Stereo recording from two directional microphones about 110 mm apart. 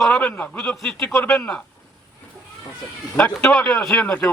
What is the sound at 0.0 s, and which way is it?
A man's voice, 10° left (ahead or behind).